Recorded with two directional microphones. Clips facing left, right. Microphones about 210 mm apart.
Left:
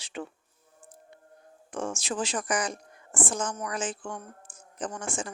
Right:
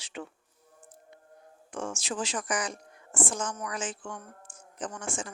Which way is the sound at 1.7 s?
35° left (ahead or behind).